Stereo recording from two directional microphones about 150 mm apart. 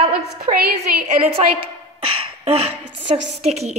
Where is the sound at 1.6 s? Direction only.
40° right (ahead or behind).